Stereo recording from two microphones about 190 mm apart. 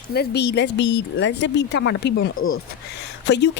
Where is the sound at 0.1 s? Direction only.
60° left (ahead or behind); by 2.6 s 90° left.